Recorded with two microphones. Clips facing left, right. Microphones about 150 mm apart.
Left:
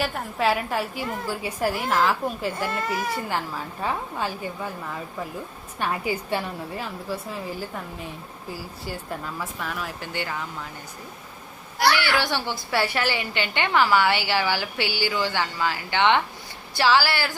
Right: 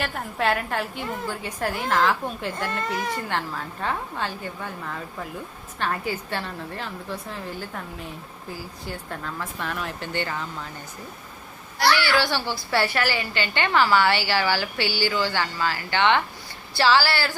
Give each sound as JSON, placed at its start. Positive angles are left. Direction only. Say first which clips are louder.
{"t": 0.0, "sound": "a woman's voice", "louder": "left 1 dB", "side_deg": 0}
{"t": 11.9, "sound": "a woman's voice", "louder": "right 1 dB", "side_deg": 15}